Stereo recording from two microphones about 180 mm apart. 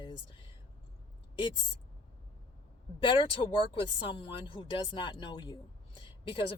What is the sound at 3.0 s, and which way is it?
Speech, 30° left (ahead or behind).